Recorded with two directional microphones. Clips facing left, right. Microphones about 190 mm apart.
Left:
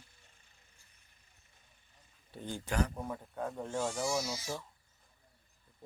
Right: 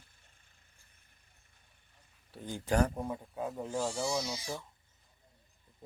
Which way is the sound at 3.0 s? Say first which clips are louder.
Right 2 dB; 10° right (ahead or behind).